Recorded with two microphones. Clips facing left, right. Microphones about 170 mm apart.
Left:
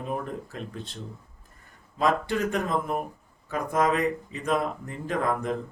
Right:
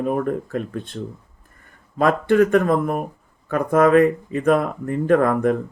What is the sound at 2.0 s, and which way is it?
Speech, 55° right (ahead or behind).